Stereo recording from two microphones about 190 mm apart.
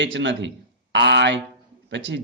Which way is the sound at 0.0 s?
75° right (ahead or behind).